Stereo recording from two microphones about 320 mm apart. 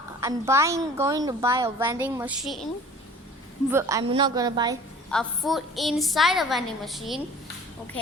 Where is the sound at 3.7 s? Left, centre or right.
Centre.